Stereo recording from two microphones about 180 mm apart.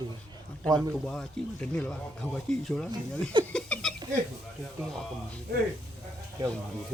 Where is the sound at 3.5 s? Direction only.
5° left (ahead or behind).